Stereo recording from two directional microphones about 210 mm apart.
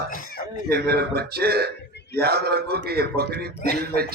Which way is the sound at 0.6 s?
45° right (ahead or behind).